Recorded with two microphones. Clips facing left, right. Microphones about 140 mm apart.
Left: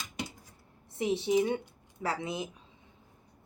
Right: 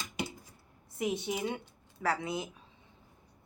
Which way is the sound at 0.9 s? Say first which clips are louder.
Left 6 dB; 30° left (ahead or behind).